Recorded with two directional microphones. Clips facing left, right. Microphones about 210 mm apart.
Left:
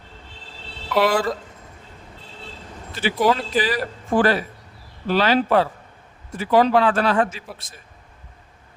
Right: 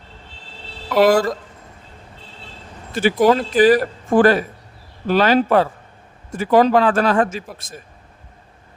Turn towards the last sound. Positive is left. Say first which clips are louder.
# right 7 dB
turn(degrees=-45)  # may be behind; listen again after turning